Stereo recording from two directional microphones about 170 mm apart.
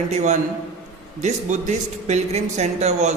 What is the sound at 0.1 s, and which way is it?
Speech, 40° right (ahead or behind).